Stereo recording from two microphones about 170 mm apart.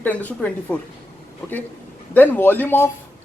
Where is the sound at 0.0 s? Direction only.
10° left (ahead or behind).